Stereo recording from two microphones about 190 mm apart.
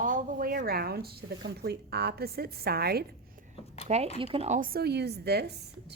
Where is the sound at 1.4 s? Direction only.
60° right (ahead or behind).